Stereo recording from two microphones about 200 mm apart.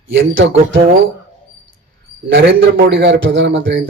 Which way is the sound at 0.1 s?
65° right (ahead or behind).